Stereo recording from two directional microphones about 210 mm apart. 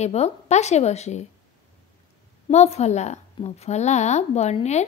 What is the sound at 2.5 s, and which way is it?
A woman's voice, 30° left (ahead or behind).